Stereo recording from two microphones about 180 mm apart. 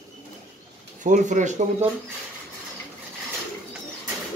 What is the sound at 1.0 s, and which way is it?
Speech, 45° right (ahead or behind).